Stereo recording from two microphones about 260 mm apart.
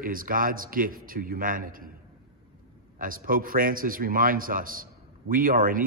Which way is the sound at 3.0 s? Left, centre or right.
Right.